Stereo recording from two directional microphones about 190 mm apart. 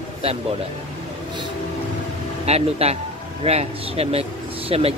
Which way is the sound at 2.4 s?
35° right (ahead or behind).